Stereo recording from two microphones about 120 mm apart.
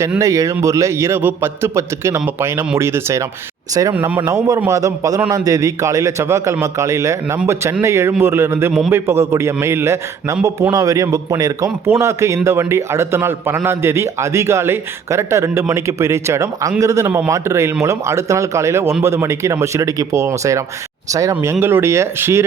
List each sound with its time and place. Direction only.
0.2 s a man's voice: 25° right (ahead or behind)